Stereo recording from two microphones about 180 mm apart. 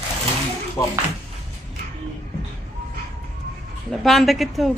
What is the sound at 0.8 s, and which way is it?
Speech, 20° left (ahead or behind).